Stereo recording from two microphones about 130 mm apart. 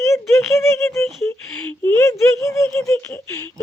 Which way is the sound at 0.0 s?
20° left (ahead or behind).